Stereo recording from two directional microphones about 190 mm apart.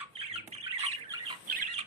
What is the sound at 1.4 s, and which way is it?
Squawk, 45° right (ahead or behind).